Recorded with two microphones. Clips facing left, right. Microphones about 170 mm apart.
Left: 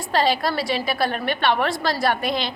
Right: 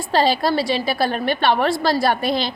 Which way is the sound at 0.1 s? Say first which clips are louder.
Right 3 dB; 30° right (ahead or behind).